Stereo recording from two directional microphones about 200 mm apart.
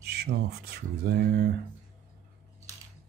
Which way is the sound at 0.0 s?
55° right (ahead or behind).